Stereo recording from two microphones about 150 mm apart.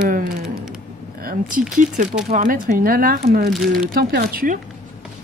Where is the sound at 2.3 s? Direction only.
65° right (ahead or behind).